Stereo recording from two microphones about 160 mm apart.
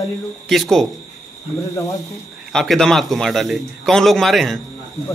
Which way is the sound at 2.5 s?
5° left (ahead or behind).